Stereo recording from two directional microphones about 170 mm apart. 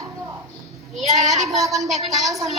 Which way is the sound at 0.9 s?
Centre (ahead or behind).